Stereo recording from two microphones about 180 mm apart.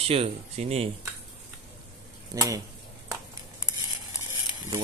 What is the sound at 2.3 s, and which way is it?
Speech, 20° right (ahead or behind).